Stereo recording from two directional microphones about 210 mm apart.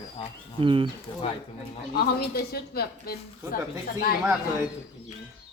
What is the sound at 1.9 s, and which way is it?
A woman's voice, 50° left (ahead or behind).